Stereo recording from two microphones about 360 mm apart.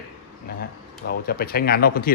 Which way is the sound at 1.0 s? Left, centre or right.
Left.